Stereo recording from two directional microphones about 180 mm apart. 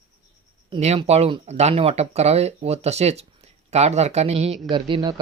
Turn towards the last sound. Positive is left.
turn(degrees=-25)  # may be behind; listen again after turning